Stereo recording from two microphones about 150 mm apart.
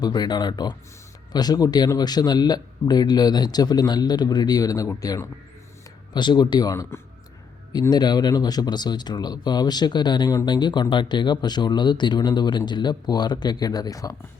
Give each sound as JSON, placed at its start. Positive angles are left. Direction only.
{"t": 0.0, "sound": "speech", "side_deg": 30}